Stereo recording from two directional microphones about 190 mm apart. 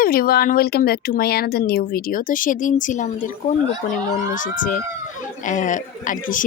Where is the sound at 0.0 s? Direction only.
50° left (ahead or behind).